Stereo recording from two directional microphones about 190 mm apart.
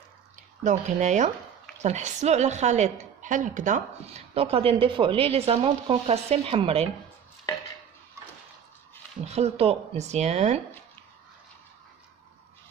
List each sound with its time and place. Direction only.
0.7 s speech: 40° right (ahead or behind)
4.3 s speech: 30° right (ahead or behind)
9.2 s speech: 35° right (ahead or behind)